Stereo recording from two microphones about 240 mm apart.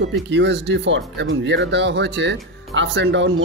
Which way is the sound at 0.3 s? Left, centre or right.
Right.